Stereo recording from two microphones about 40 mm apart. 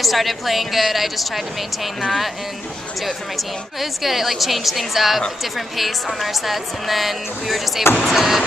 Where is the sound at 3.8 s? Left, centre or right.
Centre.